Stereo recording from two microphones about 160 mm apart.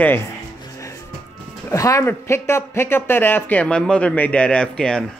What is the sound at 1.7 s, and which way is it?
Speech, 20° left (ahead or behind).